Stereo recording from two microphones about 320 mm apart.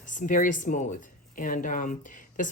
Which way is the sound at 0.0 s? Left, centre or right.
Left.